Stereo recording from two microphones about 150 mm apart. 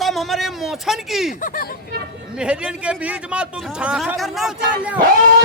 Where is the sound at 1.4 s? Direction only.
65° left (ahead or behind).